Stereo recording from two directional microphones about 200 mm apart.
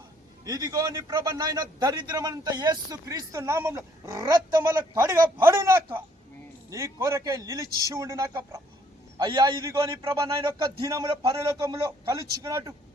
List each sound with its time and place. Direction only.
0.4 s a man's voice: 20° right (ahead or behind)